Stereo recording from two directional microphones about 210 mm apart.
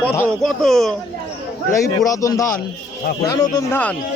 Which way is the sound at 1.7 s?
15° left (ahead or behind).